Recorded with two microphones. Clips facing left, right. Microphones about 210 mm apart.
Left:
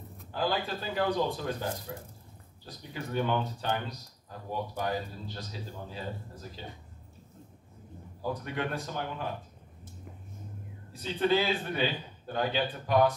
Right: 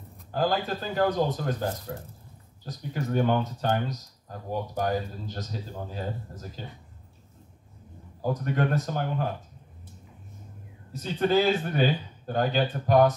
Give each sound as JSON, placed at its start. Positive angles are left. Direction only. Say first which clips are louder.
{"t": 0.3, "sound": "speech", "louder": "right 4 dB", "side_deg": -45}
{"t": 8.2, "sound": "speech", "louder": "right 6 dB", "side_deg": -45}
{"t": 10.9, "sound": "speech", "louder": "right 2 dB", "side_deg": -45}